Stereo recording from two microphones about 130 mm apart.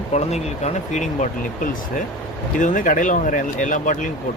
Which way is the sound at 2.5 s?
85° left.